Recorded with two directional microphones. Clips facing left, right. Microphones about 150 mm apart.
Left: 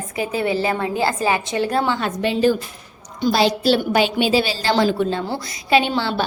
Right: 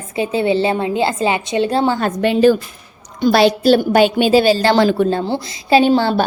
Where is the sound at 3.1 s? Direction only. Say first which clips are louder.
Right 5 dB; 60° right (ahead or behind).